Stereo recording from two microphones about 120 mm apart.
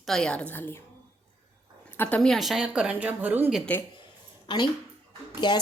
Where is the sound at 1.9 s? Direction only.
15° left (ahead or behind).